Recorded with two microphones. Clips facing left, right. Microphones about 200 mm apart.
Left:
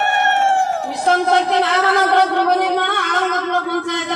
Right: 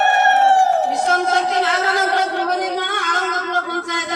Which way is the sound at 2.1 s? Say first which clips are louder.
Left 5 dB; 60° left (ahead or behind).